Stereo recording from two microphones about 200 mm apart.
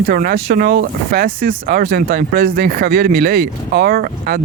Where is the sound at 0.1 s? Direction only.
45° right (ahead or behind).